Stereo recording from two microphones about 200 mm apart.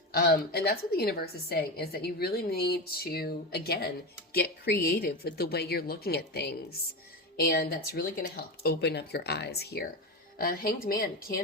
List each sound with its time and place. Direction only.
0.1 s a woman's voice: 50° left (ahead or behind)